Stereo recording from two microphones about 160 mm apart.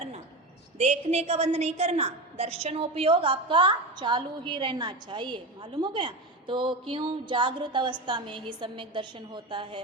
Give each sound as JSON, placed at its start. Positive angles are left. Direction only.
{"t": 0.8, "sound": "a woman's voice", "side_deg": -40}